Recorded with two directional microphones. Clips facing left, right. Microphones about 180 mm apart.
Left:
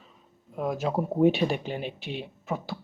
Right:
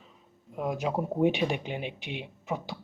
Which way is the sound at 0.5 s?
15° right (ahead or behind).